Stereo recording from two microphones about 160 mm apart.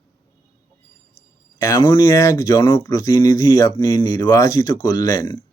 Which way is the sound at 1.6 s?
20° left (ahead or behind).